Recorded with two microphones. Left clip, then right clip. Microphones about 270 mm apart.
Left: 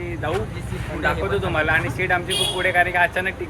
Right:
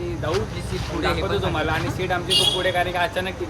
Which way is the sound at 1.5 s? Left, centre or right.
Centre.